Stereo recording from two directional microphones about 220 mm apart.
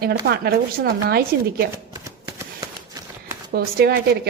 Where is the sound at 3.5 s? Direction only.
45° right (ahead or behind).